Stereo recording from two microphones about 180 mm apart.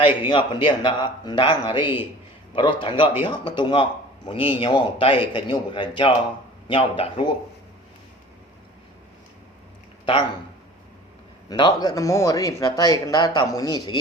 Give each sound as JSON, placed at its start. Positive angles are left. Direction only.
{"t": 0.3, "sound": "speech", "side_deg": 25}
{"t": 11.4, "sound": "speech", "side_deg": 25}